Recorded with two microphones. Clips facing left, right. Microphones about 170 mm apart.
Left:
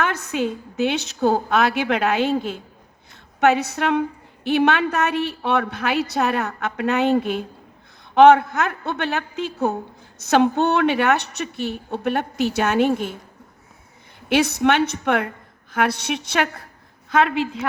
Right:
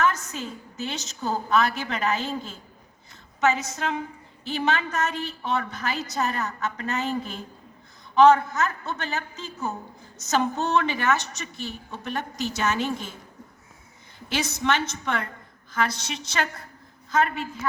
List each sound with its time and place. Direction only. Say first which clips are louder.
0.0 s a woman's voice: left 3 dB; 60° left (ahead or behind)
14.3 s a woman's voice: left 8 dB; 60° left (ahead or behind)
17.1 s a woman's voice: left 5 dB; 75° left (ahead or behind)